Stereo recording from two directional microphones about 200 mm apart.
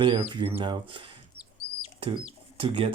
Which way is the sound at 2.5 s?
25° right (ahead or behind).